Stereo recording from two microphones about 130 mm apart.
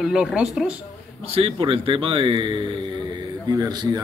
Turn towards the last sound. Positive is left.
turn(degrees=-30)  # may be behind; listen again after turning